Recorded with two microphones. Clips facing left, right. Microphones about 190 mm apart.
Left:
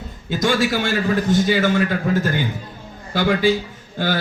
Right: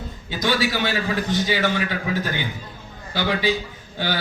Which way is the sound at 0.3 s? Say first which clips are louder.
Left 4 dB; 45° left (ahead or behind).